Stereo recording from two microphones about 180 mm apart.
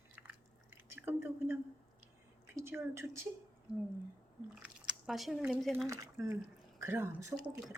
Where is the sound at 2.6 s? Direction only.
15° right (ahead or behind).